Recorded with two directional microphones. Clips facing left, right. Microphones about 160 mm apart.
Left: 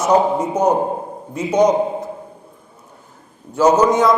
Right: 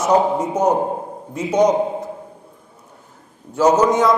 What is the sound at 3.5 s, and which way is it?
Speech, 25° left (ahead or behind).